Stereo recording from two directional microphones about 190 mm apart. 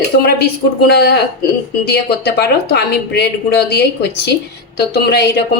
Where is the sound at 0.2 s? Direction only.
55° left (ahead or behind).